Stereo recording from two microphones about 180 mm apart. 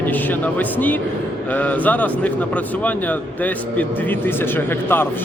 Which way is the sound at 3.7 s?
10° left (ahead or behind).